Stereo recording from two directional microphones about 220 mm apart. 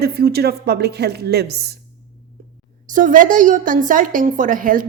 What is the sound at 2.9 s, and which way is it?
A woman's voice, 35° right (ahead or behind).